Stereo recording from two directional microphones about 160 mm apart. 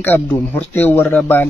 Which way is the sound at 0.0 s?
10° left (ahead or behind).